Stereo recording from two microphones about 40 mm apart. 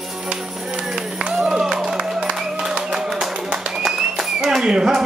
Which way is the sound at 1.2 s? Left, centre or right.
Centre.